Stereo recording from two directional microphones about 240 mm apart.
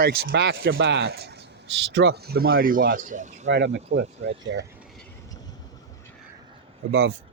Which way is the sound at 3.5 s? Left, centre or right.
Right.